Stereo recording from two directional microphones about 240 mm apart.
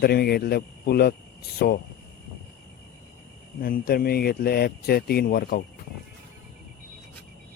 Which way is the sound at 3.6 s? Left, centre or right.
Left.